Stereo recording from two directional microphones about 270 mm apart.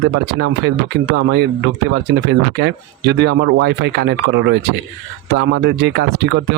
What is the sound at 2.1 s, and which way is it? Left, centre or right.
Speech, right.